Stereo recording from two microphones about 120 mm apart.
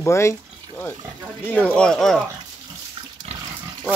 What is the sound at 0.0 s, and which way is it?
Speech, 25° left (ahead or behind).